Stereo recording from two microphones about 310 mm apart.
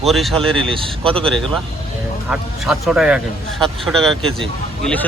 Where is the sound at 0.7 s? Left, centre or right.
Centre.